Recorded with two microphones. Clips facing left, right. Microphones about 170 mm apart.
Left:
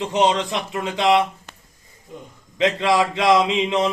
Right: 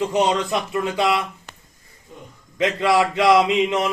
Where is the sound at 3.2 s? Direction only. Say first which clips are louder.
Right 2 dB; 20° left (ahead or behind).